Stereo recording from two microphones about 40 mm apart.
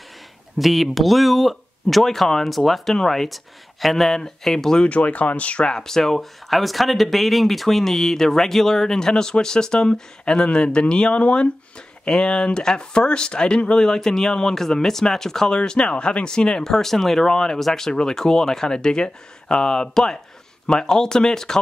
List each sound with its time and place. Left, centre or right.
0.6 s speech: centre
4.8 s speech: left
5.7 s speech: centre
6.5 s speech: centre; by 11.5 s left
12.1 s speech: centre
13.8 s speech: centre